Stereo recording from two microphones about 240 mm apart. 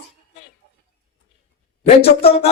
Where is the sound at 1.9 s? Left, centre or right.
Left.